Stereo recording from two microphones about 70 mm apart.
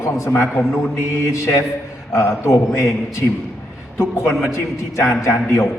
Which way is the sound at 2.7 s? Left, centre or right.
Left.